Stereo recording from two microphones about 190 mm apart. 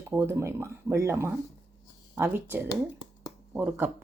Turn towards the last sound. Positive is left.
turn(degrees=-10)  # may be behind; listen again after turning